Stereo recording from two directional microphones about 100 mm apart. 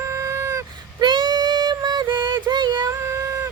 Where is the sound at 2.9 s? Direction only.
30° right (ahead or behind).